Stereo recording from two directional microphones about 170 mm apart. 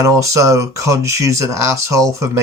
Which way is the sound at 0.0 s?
20° right (ahead or behind).